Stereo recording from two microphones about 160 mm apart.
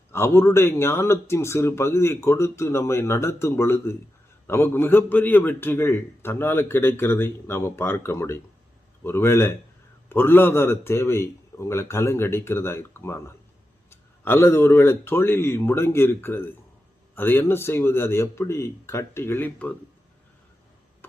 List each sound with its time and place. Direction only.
0.1 s a man's voice: 15° left (ahead or behind)